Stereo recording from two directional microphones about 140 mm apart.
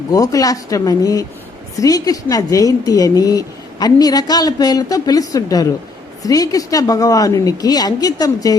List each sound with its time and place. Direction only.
0.1 s a woman's voice: 25° left (ahead or behind)